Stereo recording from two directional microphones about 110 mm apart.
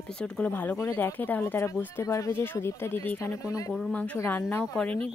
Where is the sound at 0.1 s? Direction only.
5° left (ahead or behind); by 3.7 s 30° left (ahead or behind).